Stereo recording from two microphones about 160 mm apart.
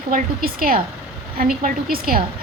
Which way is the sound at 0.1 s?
65° right (ahead or behind).